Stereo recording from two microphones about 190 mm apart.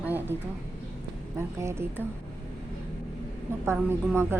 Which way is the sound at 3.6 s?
10° right (ahead or behind).